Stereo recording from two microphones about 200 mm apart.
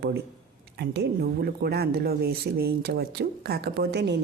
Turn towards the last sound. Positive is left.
turn(degrees=-55)  # may be behind; listen again after turning